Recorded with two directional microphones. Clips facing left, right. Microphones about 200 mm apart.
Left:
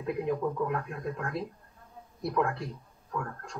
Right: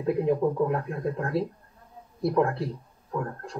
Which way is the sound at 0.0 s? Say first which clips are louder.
Right 6 dB; 30° right (ahead or behind).